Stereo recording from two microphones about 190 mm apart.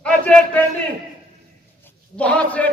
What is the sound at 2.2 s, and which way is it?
Speech, 5° left (ahead or behind).